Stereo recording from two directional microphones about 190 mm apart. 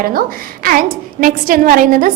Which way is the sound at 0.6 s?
45° right (ahead or behind).